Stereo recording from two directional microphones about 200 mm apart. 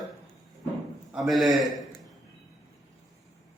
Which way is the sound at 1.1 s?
Centre (ahead or behind).